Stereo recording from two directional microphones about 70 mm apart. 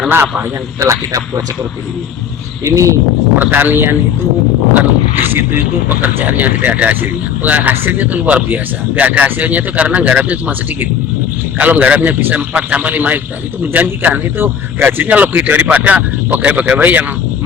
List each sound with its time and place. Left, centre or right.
0.1 s speech: right
0.8 s speech: right
2.6 s speech: right
3.3 s speech: right
5.9 s speech: right